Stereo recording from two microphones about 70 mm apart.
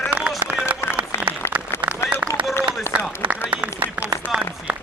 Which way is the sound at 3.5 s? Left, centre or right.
Right.